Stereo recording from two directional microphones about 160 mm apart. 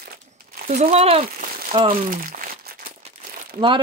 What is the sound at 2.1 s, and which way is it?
Crumpling, 60° right (ahead or behind).